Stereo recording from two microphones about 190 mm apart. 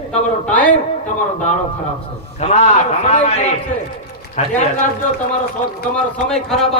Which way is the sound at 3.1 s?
35° left (ahead or behind).